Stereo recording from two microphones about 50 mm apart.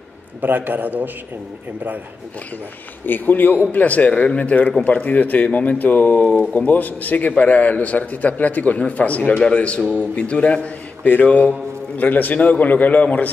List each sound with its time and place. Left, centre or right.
0.4 s a man's voice: right
3.1 s a man's voice: left
9.4 s a man's voice: left